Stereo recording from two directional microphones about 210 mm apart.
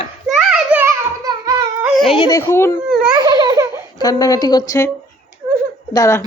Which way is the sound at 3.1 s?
20° right (ahead or behind).